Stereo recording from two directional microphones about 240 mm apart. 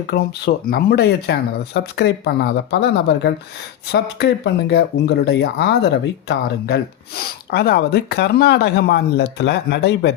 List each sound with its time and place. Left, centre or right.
0.1 s speech: left